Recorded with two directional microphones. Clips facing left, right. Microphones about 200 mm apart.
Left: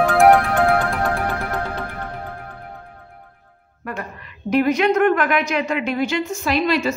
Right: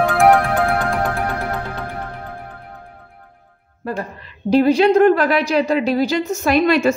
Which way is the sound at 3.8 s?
30° right (ahead or behind).